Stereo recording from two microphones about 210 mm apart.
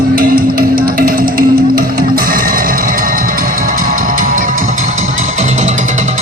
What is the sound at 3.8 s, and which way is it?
Music, 40° right (ahead or behind).